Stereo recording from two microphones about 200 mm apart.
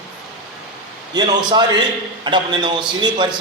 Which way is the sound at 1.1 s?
20° right (ahead or behind).